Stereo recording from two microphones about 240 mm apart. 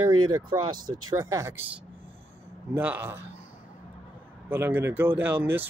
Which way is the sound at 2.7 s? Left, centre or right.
Centre.